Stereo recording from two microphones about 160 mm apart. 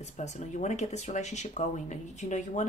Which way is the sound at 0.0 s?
45° left (ahead or behind).